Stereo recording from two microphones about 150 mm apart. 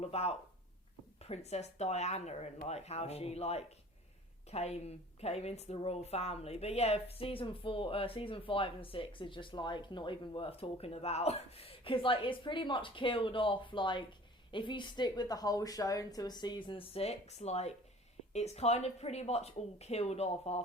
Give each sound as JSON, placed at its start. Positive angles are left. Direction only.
{"t": 0.0, "sound": "speech", "side_deg": 45}